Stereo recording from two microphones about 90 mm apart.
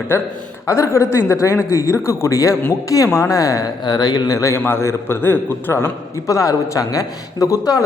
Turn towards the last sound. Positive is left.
turn(degrees=40)  # may be behind; listen again after turning